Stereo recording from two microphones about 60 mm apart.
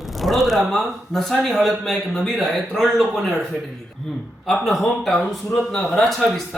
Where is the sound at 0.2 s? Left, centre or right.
Centre.